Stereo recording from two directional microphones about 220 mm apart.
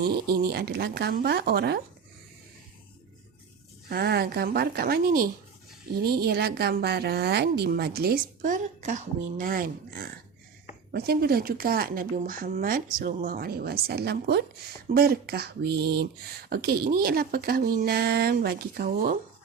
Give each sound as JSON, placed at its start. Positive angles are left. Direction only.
{"t": 0.0, "sound": "speech", "side_deg": -45}
{"t": 3.8, "sound": "speech", "side_deg": -45}